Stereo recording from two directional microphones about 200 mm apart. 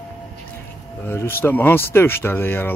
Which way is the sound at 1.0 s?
10° left (ahead or behind).